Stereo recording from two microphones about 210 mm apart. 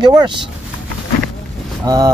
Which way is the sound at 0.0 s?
20° right (ahead or behind).